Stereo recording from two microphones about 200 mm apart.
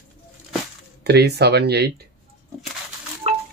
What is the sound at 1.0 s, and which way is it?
Speech, 55° right (ahead or behind).